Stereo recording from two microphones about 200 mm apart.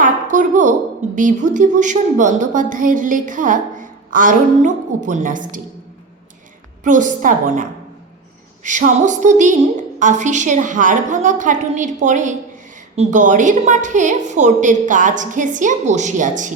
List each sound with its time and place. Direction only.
0.0 s a sound: 40° right (ahead or behind)
1.1 s a woman's voice: 40° right (ahead or behind)
6.8 s a woman's voice: 40° right (ahead or behind)